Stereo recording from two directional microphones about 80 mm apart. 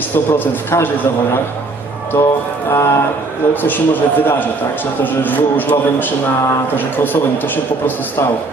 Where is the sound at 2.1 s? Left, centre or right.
Left.